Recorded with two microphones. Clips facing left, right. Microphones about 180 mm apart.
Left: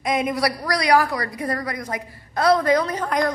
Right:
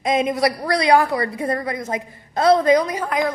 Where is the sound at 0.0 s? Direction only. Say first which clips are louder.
Right 3 dB; 25° right (ahead or behind).